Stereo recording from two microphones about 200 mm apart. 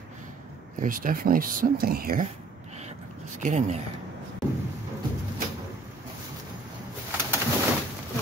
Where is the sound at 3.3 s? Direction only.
35° right (ahead or behind).